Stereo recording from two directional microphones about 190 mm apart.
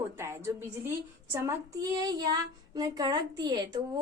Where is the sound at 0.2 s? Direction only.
15° right (ahead or behind).